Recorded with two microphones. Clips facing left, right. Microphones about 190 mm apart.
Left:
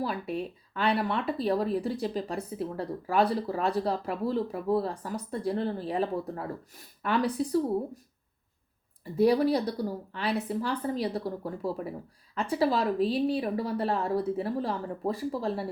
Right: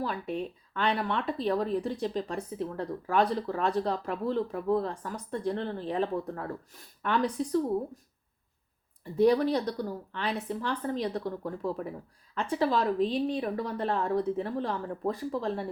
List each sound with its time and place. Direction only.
0.0 s speech: 10° left (ahead or behind)
9.1 s speech: 10° left (ahead or behind)